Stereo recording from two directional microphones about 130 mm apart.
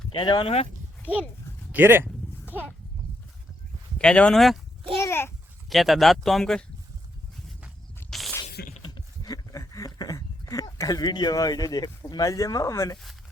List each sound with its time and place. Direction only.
0.1 s speech: 40° left (ahead or behind)
1.7 s a child's voice: 15° right (ahead or behind)
3.9 s speech: 10° left (ahead or behind)
4.9 s a child's voice: 20° left (ahead or behind)
5.6 s speech: centre (ahead or behind)
8.1 s a sound: centre (ahead or behind)
8.8 s a sound: 30° left (ahead or behind)